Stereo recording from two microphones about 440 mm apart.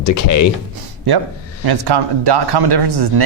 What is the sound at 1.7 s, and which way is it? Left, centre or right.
Speech, right.